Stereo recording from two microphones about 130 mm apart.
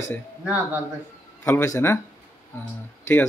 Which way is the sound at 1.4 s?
20° left (ahead or behind).